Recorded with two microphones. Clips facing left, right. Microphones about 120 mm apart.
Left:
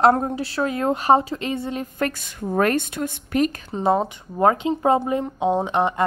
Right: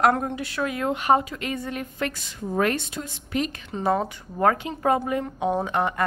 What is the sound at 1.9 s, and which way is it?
A woman's voice, 50° left (ahead or behind).